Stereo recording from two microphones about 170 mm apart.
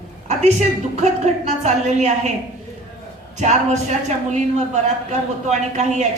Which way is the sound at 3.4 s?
45° right (ahead or behind).